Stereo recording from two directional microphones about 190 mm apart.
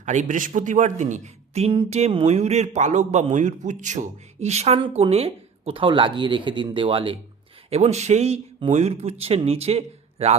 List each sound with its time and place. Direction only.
0.0 s speech: 40° right (ahead or behind)